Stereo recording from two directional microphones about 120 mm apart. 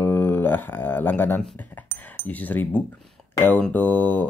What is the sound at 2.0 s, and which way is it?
Speech, 15° left (ahead or behind).